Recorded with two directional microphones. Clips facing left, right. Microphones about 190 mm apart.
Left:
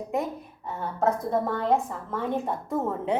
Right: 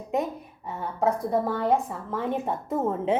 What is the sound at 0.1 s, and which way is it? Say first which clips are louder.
A woman's voice: right 3 dB; 15° right (ahead or behind).